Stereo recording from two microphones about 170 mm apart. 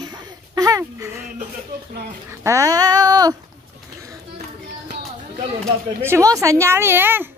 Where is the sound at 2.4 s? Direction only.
20° right (ahead or behind).